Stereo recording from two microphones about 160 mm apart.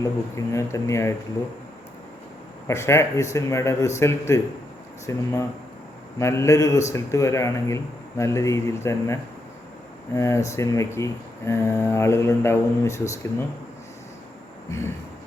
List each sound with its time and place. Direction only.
0.0 s speech: 20° left (ahead or behind)
2.6 s speech: 15° left (ahead or behind)
10.2 s speech: 15° left (ahead or behind)
14.7 s speech: 15° left (ahead or behind)